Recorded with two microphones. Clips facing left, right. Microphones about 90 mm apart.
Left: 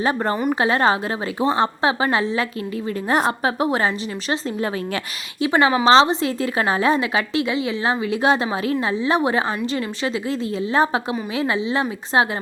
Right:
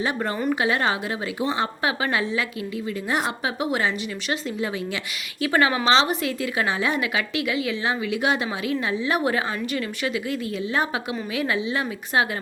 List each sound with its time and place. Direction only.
0.0 s a woman's voice: 35° left (ahead or behind)
5.4 s a woman's voice: 25° left (ahead or behind)